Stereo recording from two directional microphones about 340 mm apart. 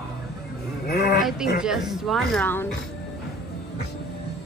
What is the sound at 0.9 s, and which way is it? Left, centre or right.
Speech, left.